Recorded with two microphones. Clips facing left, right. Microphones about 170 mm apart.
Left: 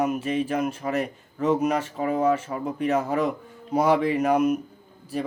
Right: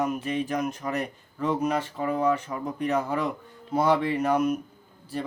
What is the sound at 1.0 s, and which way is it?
Speech, 5° left (ahead or behind).